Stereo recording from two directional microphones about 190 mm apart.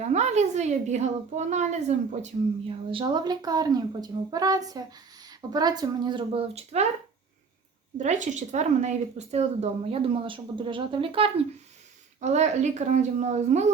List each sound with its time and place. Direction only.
0.0 s a woman's voice: 35° right (ahead or behind)
7.9 s speech: 40° right (ahead or behind)